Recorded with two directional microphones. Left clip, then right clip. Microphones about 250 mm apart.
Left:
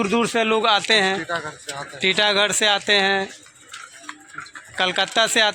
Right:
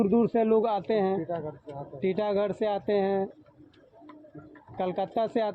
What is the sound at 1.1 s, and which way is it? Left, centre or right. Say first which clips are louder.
Speech: left 6 dB; left.